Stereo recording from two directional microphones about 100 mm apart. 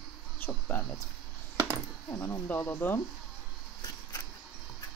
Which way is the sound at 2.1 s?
25° left (ahead or behind).